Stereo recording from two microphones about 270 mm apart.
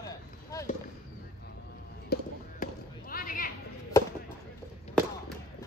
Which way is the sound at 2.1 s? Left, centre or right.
Left.